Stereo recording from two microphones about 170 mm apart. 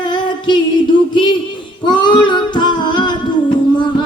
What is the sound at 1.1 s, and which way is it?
Speech, 25° left (ahead or behind).